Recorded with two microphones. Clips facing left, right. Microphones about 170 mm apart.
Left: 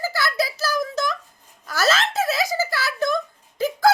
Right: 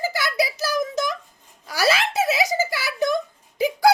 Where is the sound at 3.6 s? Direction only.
15° right (ahead or behind).